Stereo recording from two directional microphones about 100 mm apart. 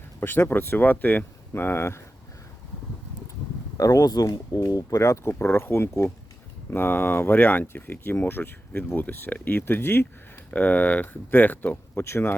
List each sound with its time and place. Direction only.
0.2 s speech: 20° left (ahead or behind)
3.8 s speech: 35° left (ahead or behind)